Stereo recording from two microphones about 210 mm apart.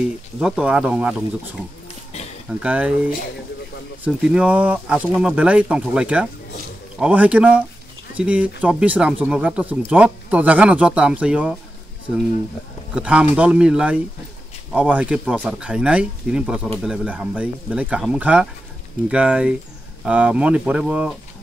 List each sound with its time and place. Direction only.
0.4 s speech: 5° right (ahead or behind)
2.6 s speech: 5° right (ahead or behind)
4.0 s speech: 5° right (ahead or behind)
12.9 s speech: 5° right (ahead or behind)